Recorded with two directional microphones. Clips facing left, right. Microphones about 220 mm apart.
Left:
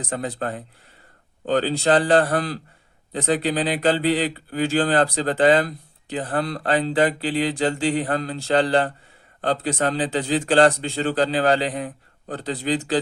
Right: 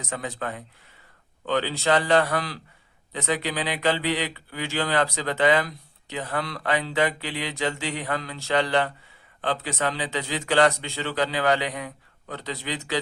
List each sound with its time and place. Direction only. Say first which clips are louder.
0.0 s a man's voice: left 5 dB; 35° left (ahead or behind)